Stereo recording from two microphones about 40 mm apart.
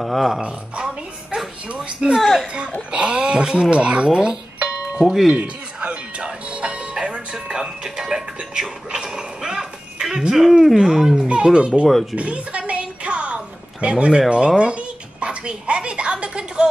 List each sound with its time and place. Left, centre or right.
0.0 s speech: centre
0.4 s speech: right
2.1 s speech: centre
2.4 s speech: right
4.1 s speech: centre
4.6 s music: right
5.0 s speech: centre
5.3 s music: right; by 10.4 s centre
10.4 s speech: centre
11.2 s speech: right
11.9 s speech: centre
12.2 s a sound: right
14.6 s speech: right